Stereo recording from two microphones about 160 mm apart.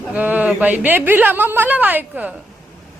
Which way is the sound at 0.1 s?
10° right (ahead or behind).